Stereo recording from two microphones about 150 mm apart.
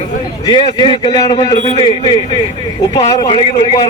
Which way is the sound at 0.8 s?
30° left (ahead or behind).